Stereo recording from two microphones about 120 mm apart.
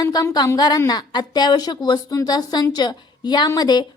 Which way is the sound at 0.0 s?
30° left (ahead or behind).